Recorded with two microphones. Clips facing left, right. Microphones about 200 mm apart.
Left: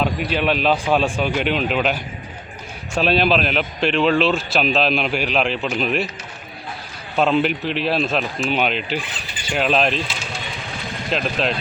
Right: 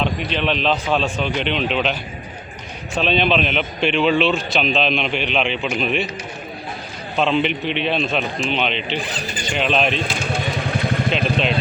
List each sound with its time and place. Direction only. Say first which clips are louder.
0.0 s a man's voice: left 1 dB; 5° left (ahead or behind)
7.2 s a man's voice: left 1 dB; 5° left (ahead or behind)
9.0 s speech: right 4 dB; 40° right (ahead or behind)
9.4 s speech: left 1 dB; 5° left (ahead or behind)
10.0 s a sound: right 5 dB; 55° right (ahead or behind)
11.1 s a man's voice: left 2 dB; centre (ahead or behind)